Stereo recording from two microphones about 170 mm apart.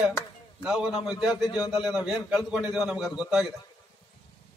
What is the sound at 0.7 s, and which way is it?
Speech, 5° right (ahead or behind).